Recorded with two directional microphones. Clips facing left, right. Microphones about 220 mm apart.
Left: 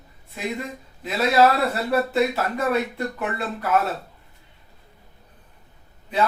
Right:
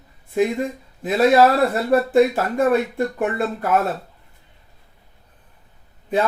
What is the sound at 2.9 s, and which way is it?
Speech, 50° right (ahead or behind).